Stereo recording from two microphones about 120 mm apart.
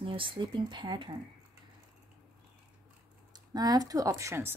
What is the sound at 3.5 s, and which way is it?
Speech, 30° right (ahead or behind).